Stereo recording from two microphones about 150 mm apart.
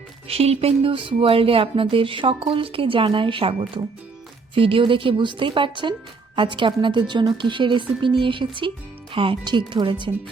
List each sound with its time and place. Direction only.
0.3 s speech: 40° right (ahead or behind)